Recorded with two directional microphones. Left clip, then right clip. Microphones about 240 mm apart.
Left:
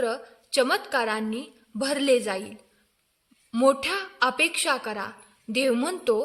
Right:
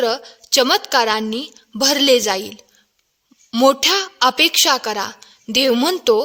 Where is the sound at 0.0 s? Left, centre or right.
Right.